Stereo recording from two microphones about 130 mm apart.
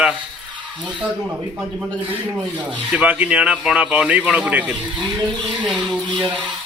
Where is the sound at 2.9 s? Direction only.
10° right (ahead or behind).